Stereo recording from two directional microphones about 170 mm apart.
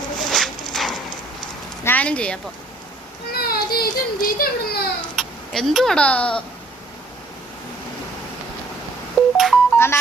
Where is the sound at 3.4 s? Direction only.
60° left (ahead or behind).